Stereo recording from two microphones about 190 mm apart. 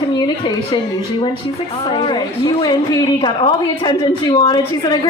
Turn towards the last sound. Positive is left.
turn(degrees=20)  # may be behind; listen again after turning